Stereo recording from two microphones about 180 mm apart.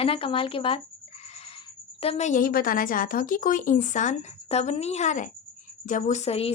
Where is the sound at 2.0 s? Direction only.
35° left (ahead or behind).